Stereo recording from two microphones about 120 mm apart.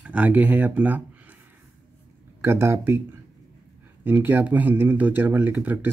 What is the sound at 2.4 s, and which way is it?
Speech, 20° right (ahead or behind).